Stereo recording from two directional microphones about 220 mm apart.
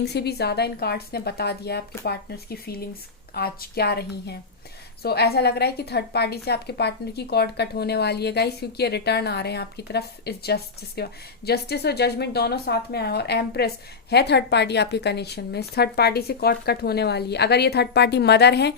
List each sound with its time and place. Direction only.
0.0 s a woman's voice: 50° left (ahead or behind)